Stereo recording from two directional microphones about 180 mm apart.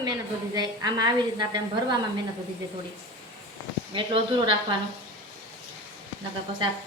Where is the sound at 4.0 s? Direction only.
25° right (ahead or behind).